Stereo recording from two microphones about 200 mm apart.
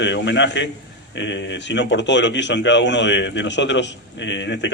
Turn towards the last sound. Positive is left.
turn(degrees=60)  # may be behind; listen again after turning